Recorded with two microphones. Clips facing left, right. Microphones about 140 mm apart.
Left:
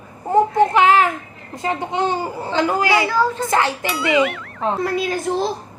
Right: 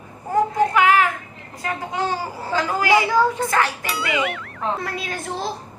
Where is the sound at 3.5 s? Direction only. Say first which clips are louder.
Left 2 dB; 25° left (ahead or behind).